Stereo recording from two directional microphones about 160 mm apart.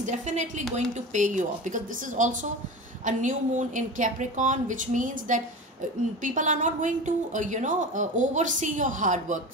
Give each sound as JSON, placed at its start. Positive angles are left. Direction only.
{"t": 0.0, "sound": "a woman's voice", "side_deg": -45}